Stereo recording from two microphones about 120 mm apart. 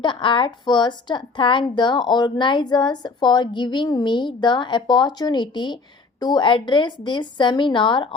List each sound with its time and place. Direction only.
0.0 s a woman's voice: 40° left (ahead or behind)